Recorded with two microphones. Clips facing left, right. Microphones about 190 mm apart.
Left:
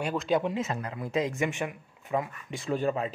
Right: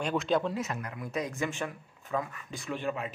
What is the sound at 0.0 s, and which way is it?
Speech, 5° left (ahead or behind).